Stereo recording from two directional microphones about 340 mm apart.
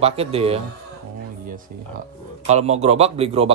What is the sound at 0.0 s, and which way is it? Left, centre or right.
A man's voice, centre.